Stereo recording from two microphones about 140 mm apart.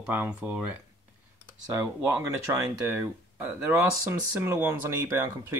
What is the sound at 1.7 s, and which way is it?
Speech, 15° right (ahead or behind).